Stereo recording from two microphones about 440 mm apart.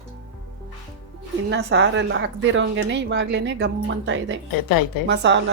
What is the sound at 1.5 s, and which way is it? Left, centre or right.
Speech, right.